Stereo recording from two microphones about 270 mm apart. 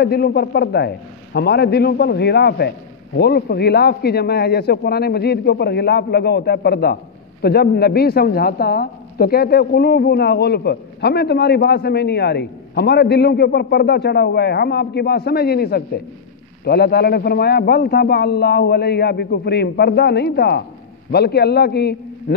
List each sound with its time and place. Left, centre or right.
0.0 s a woman's voice: left